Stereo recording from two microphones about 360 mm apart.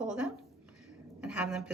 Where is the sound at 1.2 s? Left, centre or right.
Centre.